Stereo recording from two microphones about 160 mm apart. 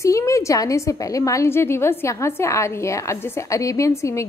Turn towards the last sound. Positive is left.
turn(degrees=20)  # may be behind; listen again after turning